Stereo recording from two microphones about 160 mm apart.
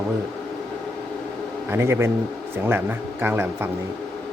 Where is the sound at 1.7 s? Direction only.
15° right (ahead or behind).